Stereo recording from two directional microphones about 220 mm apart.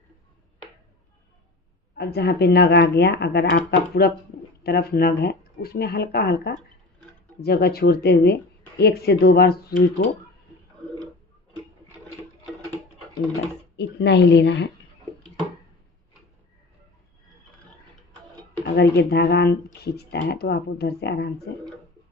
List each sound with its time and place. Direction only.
2.0 s speech: 45° left (ahead or behind)
13.7 s speech: 50° left (ahead or behind)
18.6 s speech: 50° left (ahead or behind)